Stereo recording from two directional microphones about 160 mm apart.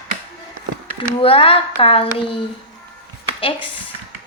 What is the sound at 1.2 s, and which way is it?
A woman's voice, 35° left (ahead or behind).